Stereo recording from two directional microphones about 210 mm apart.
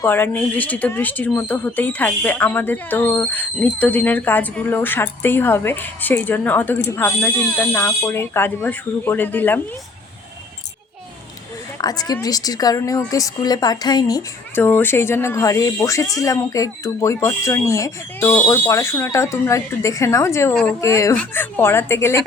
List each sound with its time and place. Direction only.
0.0 s speech: 10° left (ahead or behind)
11.8 s speech: 20° left (ahead or behind)
20.8 s speech: 15° left (ahead or behind)